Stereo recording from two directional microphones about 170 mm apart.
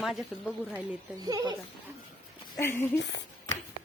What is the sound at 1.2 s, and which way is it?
Speech, 20° right (ahead or behind).